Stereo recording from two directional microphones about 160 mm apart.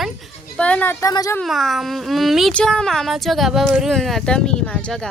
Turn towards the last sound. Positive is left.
turn(degrees=5)  # may be behind; listen again after turning